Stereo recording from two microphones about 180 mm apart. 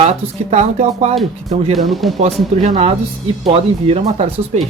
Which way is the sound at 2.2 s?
40° right (ahead or behind).